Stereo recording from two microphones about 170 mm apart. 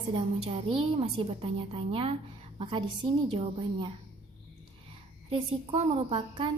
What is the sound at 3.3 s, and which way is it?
Speech, 30° right (ahead or behind).